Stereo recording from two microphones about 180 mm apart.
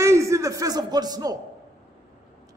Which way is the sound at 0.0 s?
15° right (ahead or behind).